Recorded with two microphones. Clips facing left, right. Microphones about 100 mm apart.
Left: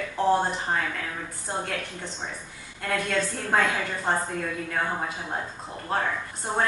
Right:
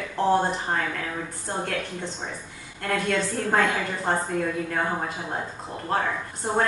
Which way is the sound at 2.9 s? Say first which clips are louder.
Right 2 dB; centre (ahead or behind).